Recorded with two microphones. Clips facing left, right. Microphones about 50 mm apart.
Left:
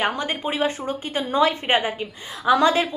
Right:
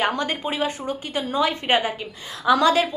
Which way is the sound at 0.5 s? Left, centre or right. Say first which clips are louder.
Left 1 dB; left.